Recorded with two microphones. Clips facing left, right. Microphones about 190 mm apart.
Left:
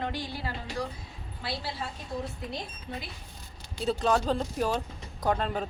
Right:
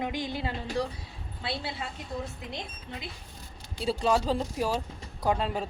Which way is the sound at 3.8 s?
5° right (ahead or behind).